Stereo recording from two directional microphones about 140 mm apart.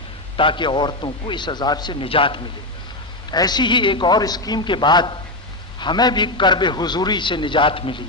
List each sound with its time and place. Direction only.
0.3 s a man's voice: 35° left (ahead or behind)